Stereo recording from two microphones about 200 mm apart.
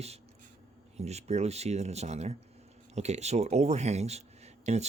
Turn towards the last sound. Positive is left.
turn(degrees=-35)  # may be behind; listen again after turning